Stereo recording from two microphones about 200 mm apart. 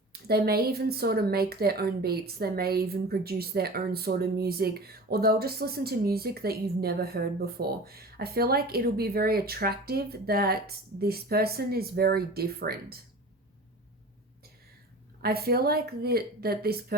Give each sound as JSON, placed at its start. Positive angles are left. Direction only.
{"t": 0.1, "sound": "speech", "side_deg": -50}
{"t": 15.2, "sound": "speech", "side_deg": -50}